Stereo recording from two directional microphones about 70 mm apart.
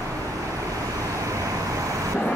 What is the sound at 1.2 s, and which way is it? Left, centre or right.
Vehicle, right.